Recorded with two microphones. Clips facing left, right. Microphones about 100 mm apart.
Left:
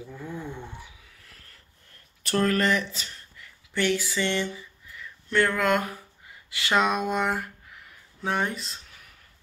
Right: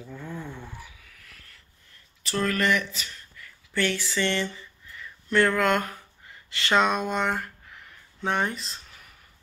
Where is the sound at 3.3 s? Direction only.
15° left (ahead or behind); by 8.8 s centre (ahead or behind).